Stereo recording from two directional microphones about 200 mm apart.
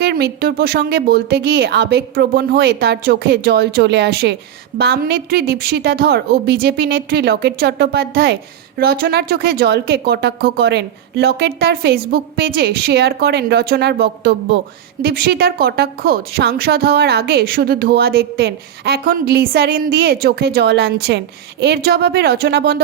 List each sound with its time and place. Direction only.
0.0 s a woman's voice: 55° right (ahead or behind)